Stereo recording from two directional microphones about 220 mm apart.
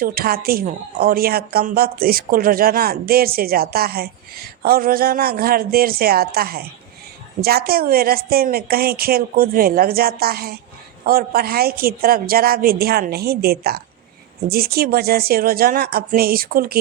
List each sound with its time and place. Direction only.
0.0 s speech: 40° right (ahead or behind)